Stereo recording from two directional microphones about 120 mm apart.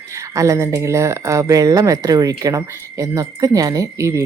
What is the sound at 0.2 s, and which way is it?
Speech, 25° right (ahead or behind).